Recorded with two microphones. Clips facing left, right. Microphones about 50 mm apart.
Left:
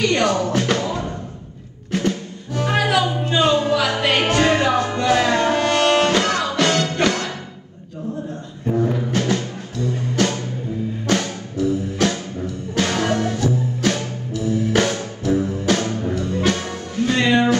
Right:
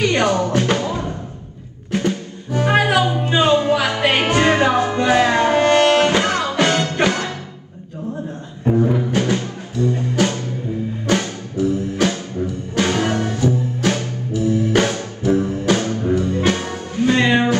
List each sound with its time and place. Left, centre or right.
0.0 s music: centre
8.9 s music: centre